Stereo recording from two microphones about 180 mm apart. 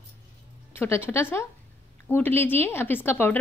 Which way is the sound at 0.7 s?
15° left (ahead or behind).